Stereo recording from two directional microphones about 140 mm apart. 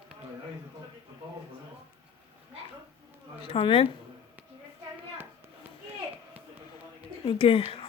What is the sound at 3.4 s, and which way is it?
Speech, 40° left (ahead or behind).